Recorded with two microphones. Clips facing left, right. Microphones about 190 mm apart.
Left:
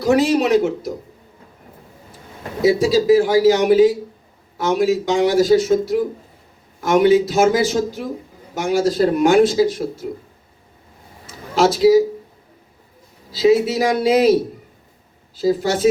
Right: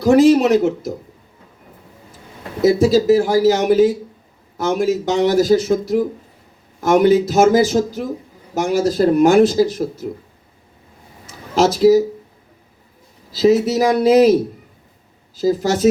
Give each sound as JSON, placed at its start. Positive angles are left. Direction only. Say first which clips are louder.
{"t": 0.0, "sound": "speech", "louder": "right 5 dB", "side_deg": -45}
{"t": 2.6, "sound": "speech", "louder": "right 1 dB", "side_deg": -45}
{"t": 11.5, "sound": "speech", "louder": "right 1 dB", "side_deg": -40}
{"t": 13.3, "sound": "speech", "louder": "right 1 dB", "side_deg": -40}
{"t": 15.4, "sound": "speech", "louder": "right 1 dB", "side_deg": -40}